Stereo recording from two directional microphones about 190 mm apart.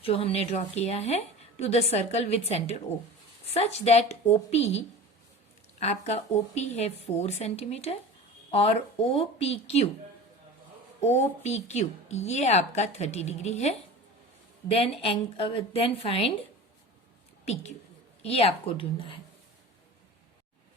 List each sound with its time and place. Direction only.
0.0 s a woman's voice: 30° left (ahead or behind)
5.8 s a woman's voice: 35° left (ahead or behind)
11.0 s a woman's voice: 35° left (ahead or behind)
17.4 s a woman's voice: 35° left (ahead or behind)